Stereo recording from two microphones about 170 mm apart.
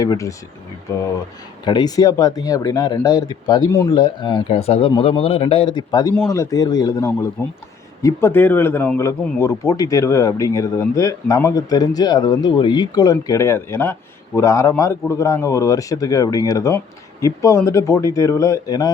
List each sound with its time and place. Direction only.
0.0 s speech: 20° left (ahead or behind)
1.6 s speech: 25° left (ahead or behind)